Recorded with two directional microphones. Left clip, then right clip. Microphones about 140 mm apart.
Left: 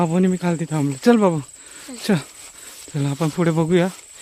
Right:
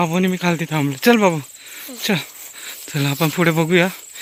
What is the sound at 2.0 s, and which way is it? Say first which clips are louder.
Speech: right 2 dB; 55° left (ahead or behind).